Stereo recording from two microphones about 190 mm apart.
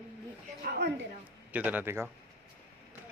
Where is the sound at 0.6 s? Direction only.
55° right (ahead or behind).